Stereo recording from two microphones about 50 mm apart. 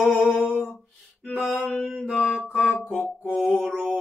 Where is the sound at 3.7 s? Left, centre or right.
Centre.